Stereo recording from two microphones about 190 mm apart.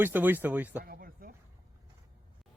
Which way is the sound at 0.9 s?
50° right (ahead or behind).